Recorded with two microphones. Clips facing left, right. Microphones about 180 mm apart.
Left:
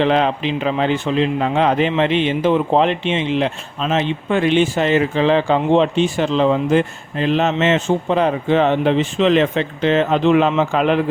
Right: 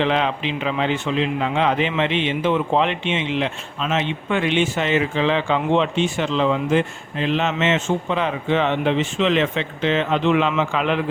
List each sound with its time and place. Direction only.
0.0 s a man's voice: 40° left (ahead or behind)